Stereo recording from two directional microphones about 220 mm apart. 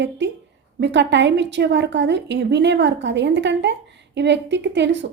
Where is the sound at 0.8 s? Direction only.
50° right (ahead or behind).